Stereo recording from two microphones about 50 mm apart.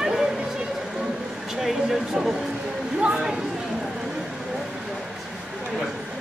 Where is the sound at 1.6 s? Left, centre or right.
Centre.